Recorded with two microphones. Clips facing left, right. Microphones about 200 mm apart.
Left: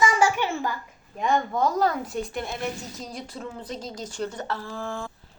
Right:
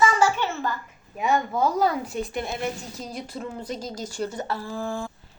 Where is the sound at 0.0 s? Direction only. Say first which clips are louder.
Right 1 dB; 15° left (ahead or behind).